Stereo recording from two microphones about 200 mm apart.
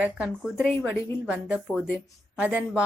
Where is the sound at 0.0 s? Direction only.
5° right (ahead or behind).